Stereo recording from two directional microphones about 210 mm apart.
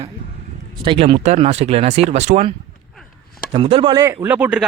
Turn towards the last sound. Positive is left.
turn(degrees=-5)  # may be behind; listen again after turning